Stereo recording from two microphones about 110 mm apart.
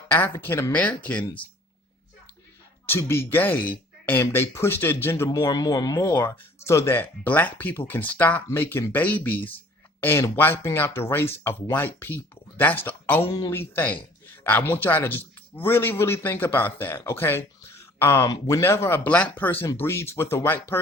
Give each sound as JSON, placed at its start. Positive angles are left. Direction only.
{"t": 0.3, "sound": "speech", "side_deg": 25}
{"t": 2.8, "sound": "speech", "side_deg": 20}
{"t": 5.5, "sound": "speech", "side_deg": 35}